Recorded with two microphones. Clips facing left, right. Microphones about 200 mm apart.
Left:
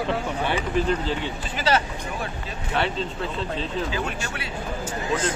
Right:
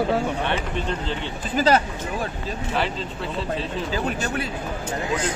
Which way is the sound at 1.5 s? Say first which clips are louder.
Right 5 dB; 40° right (ahead or behind).